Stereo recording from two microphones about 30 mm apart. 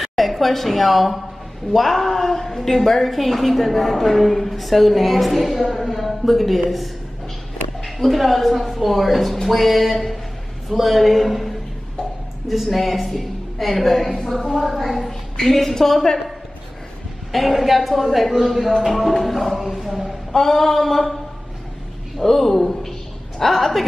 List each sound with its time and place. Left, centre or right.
0.1 s a woman's voice: centre
12.7 s a woman's voice: centre
17.3 s a woman's voice: centre
20.3 s a woman's voice: centre
22.2 s a woman's voice: centre